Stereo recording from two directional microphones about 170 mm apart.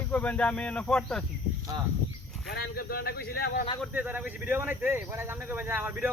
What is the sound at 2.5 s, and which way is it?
Speech, 65° left (ahead or behind).